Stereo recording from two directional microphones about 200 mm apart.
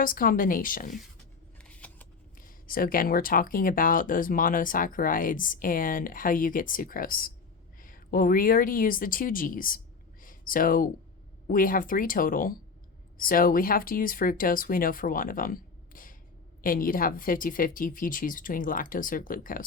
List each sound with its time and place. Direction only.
0.0 s speech: 45° left (ahead or behind)
1.6 s shuffling cards: 5° left (ahead or behind)
2.4 s a woman's voice: 45° left (ahead or behind)